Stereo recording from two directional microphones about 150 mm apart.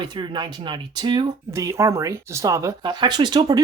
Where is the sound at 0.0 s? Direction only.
30° right (ahead or behind).